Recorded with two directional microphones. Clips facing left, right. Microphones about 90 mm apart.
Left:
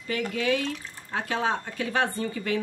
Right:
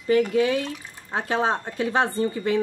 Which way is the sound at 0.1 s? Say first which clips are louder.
Right 7 dB; 30° right (ahead or behind).